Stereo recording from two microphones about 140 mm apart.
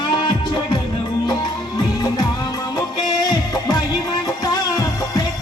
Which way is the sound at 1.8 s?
30° left (ahead or behind).